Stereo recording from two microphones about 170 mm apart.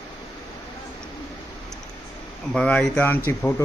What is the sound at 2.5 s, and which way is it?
Speech, 5° left (ahead or behind).